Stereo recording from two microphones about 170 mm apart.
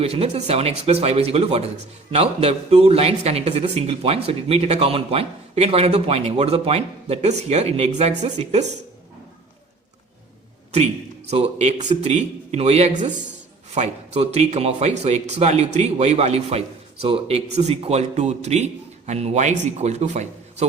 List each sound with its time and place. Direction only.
0.0 s speech: 35° right (ahead or behind)
11.3 s speech: 40° right (ahead or behind)